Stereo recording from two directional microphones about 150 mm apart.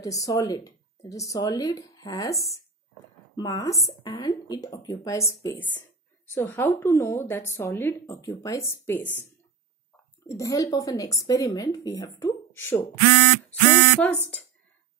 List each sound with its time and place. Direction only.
0.0 s a woman's voice: 20° left (ahead or behind)
10.2 s speech: 20° left (ahead or behind)
13.5 s a sound: 10° left (ahead or behind)